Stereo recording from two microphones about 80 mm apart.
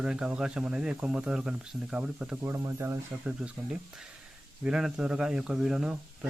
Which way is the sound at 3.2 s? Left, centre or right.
Centre.